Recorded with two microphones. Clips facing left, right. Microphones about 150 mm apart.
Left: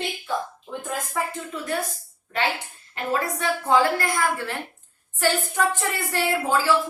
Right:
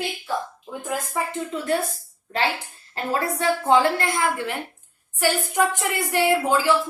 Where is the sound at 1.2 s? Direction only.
15° right (ahead or behind).